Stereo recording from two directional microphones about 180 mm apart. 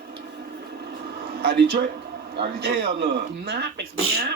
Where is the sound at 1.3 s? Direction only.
60° right (ahead or behind).